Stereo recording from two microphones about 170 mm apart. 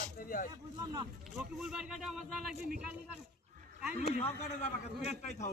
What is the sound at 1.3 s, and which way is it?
Speech, 5° right (ahead or behind).